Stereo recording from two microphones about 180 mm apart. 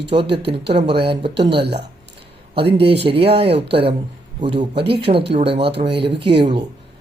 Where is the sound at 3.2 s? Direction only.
65° right (ahead or behind).